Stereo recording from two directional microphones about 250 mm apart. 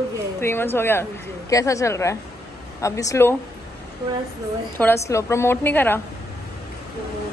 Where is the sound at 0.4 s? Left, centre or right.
Centre.